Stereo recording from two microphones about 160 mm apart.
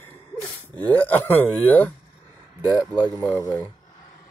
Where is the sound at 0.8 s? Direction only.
10° left (ahead or behind).